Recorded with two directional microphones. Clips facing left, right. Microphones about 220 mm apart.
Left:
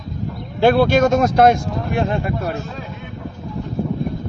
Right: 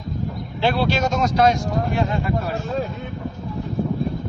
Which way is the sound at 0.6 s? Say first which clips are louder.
Left 7 dB; 50° left (ahead or behind).